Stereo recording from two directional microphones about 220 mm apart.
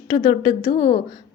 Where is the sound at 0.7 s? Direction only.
35° left (ahead or behind).